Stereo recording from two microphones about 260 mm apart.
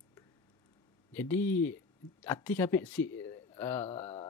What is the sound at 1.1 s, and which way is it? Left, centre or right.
Speech, centre.